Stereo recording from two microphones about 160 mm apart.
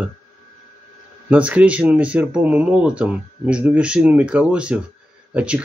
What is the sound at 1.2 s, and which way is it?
Speech, 10° right (ahead or behind).